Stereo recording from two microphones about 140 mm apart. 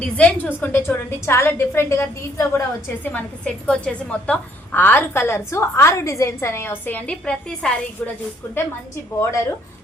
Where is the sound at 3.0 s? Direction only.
10° left (ahead or behind).